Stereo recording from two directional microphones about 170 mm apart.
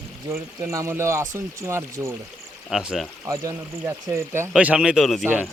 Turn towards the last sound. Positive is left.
turn(degrees=-5)  # may be behind; listen again after turning